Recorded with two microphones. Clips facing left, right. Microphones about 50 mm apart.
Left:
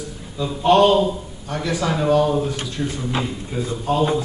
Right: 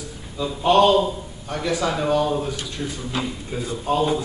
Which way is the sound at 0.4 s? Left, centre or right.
Centre.